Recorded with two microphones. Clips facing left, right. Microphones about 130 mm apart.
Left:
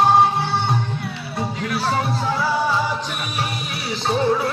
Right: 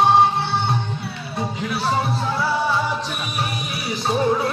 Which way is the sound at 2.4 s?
10° left (ahead or behind).